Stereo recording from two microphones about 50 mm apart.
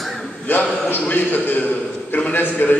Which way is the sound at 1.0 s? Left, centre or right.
Left.